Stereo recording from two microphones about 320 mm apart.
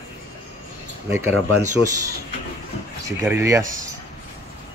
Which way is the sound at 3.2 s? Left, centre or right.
Centre.